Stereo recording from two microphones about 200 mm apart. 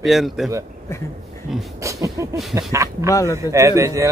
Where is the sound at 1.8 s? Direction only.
15° right (ahead or behind).